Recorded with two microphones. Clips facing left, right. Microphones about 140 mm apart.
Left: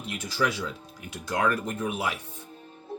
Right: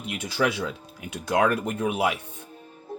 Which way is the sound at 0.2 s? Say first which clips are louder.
Right 3 dB; 60° right (ahead or behind).